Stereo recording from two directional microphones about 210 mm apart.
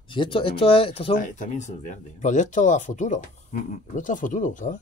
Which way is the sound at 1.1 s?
35° left (ahead or behind).